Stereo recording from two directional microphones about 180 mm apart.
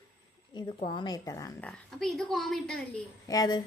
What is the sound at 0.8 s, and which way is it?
Speech, 30° left (ahead or behind).